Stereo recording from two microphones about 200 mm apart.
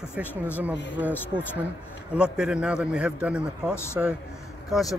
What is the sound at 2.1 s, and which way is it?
Speech, 5° right (ahead or behind).